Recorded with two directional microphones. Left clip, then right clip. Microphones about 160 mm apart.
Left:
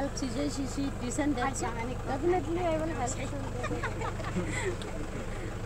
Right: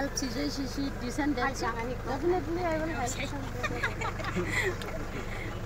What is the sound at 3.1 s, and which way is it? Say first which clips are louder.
Speech: right 1 dB; 60° right (ahead or behind).